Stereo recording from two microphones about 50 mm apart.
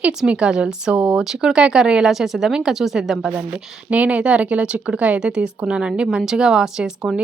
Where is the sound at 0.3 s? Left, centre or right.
Centre.